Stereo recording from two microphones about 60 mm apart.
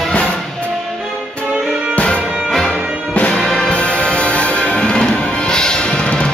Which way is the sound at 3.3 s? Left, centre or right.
Centre.